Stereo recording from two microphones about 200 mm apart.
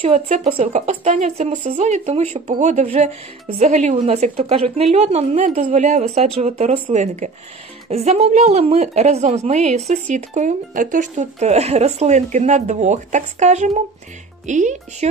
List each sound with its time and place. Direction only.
0.0 s a woman's voice: 30° right (ahead or behind)